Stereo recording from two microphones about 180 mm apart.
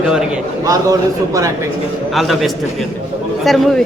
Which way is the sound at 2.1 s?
Centre (ahead or behind).